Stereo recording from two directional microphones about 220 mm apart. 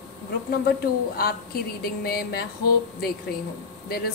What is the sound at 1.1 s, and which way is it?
A woman's voice, 45° left (ahead or behind).